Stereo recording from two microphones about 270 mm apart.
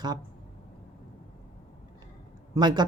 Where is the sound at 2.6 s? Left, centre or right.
Centre.